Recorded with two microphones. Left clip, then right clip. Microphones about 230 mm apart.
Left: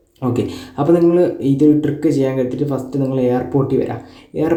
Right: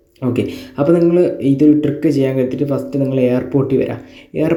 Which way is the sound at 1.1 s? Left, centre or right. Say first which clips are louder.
Right 1 dB; centre.